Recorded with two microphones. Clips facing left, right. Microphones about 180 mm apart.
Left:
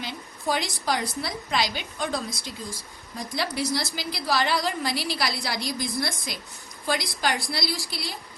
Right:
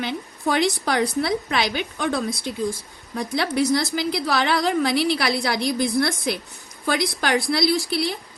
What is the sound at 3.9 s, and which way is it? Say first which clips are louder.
A woman's voice: right 5 dB; 60° right (ahead or behind).